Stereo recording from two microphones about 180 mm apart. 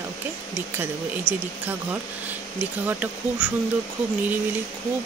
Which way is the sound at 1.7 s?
10° right (ahead or behind).